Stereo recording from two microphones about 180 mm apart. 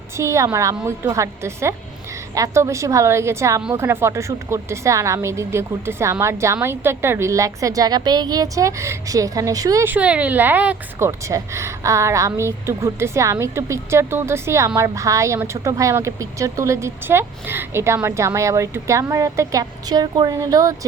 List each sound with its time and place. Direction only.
0.2 s speech: 15° right (ahead or behind)